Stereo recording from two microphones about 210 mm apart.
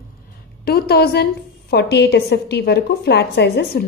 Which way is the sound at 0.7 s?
50° left (ahead or behind).